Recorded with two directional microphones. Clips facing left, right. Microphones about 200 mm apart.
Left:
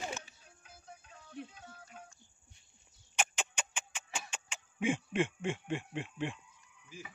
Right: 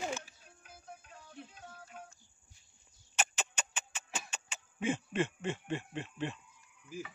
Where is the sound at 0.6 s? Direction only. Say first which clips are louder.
Right 3 dB; 55° right (ahead or behind).